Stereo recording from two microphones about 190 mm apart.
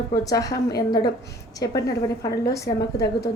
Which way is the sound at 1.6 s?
20° left (ahead or behind).